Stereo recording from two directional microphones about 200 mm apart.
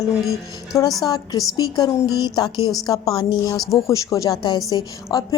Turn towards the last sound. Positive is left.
turn(degrees=20)  # may be behind; listen again after turning